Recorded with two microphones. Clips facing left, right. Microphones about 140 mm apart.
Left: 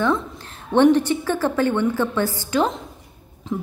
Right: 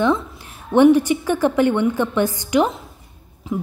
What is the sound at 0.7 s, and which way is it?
A woman's voice, 10° right (ahead or behind).